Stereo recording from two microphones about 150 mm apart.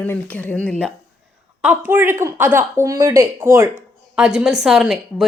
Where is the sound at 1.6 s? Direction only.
10° right (ahead or behind).